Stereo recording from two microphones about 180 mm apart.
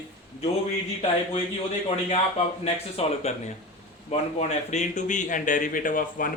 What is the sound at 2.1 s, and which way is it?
A man's voice, 35° left (ahead or behind).